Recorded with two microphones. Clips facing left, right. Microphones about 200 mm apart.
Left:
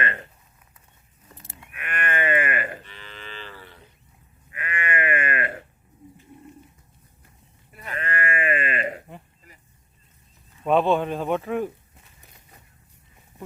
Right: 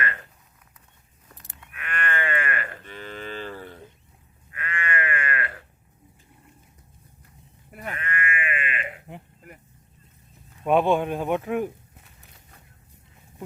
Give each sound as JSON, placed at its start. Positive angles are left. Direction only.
{"t": 0.0, "sound": "a sound", "side_deg": 20}
{"t": 1.3, "sound": "cattle", "side_deg": 0}
{"t": 1.7, "sound": "sheep", "side_deg": 20}
{"t": 2.8, "sound": "livestock", "side_deg": -50}
{"t": 4.5, "sound": "sheep", "side_deg": 15}
{"t": 7.7, "sound": "sheep", "side_deg": -55}
{"t": 7.9, "sound": "sheep", "side_deg": 35}
{"t": 10.6, "sound": "speech", "side_deg": -10}